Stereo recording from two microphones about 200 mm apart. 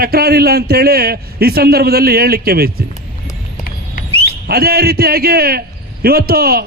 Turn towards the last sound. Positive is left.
turn(degrees=-50)  # may be behind; listen again after turning